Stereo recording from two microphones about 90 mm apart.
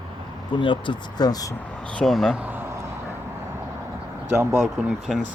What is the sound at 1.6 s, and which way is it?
Speech, 15° left (ahead or behind).